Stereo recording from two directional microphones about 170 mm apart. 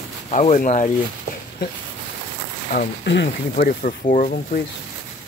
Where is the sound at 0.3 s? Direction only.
45° left (ahead or behind).